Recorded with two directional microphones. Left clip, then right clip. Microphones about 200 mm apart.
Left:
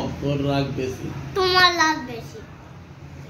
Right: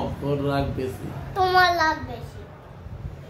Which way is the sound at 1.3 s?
15° right (ahead or behind).